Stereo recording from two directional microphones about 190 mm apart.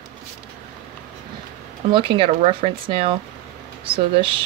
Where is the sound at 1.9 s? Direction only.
30° right (ahead or behind).